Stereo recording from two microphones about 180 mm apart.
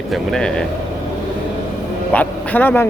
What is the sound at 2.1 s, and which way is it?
Speech, 10° left (ahead or behind).